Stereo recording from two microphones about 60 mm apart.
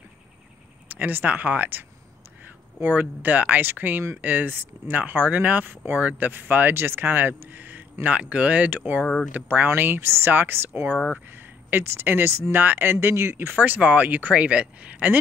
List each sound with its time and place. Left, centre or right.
0.8 s speech: right
9.0 s speech: centre
9.3 s speech: right
11.3 s a sound: right
12.1 s speech: right
13.5 s speech: right